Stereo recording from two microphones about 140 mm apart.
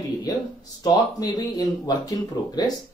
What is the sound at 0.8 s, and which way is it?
Speech, 30° left (ahead or behind).